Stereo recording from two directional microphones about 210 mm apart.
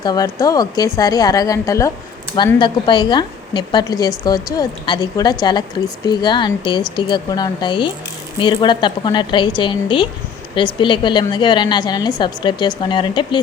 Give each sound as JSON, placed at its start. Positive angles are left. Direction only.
{"t": 0.0, "sound": "a woman's voice", "side_deg": 20}